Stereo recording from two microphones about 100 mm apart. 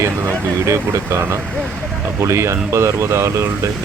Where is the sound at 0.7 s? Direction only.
30° right (ahead or behind).